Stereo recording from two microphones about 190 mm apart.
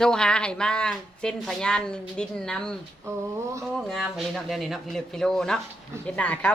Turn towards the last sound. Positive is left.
turn(degrees=5)  # may be behind; listen again after turning